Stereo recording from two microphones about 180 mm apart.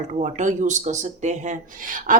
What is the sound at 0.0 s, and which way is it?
Speech, 40° right (ahead or behind).